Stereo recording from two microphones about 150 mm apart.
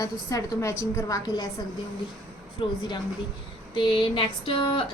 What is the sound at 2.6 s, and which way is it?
Speech, 30° left (ahead or behind).